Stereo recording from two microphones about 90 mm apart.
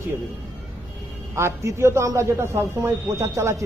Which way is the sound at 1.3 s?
30° right (ahead or behind).